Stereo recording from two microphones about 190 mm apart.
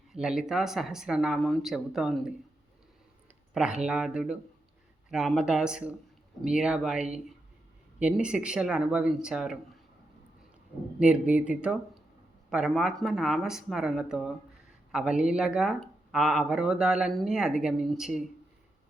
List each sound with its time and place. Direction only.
0.1 s speech: 5° right (ahead or behind)
3.5 s speech: 5° right (ahead or behind)
11.0 s speech: 5° right (ahead or behind)